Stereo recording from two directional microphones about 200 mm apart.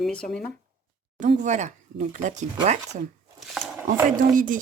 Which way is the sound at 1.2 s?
35° right (ahead or behind).